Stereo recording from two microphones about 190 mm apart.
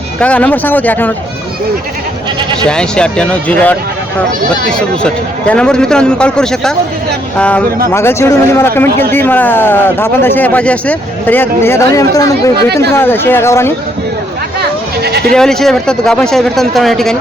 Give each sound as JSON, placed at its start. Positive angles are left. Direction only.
{"t": 0.2, "sound": "speech", "side_deg": 5}
{"t": 2.6, "sound": "a man's voice", "side_deg": 5}
{"t": 4.8, "sound": "a man's voice", "side_deg": 5}
{"t": 14.6, "sound": "goat", "side_deg": -60}
{"t": 15.3, "sound": "a man's voice", "side_deg": 5}